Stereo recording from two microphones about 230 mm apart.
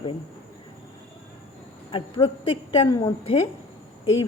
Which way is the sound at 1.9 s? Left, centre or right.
Left.